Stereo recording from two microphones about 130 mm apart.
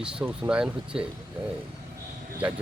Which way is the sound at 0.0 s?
5° right (ahead or behind).